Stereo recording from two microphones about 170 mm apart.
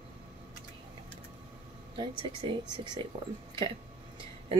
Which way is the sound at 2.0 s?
25° right (ahead or behind).